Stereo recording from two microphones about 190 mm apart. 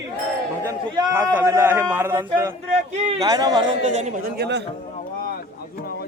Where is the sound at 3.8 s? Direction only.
35° right (ahead or behind).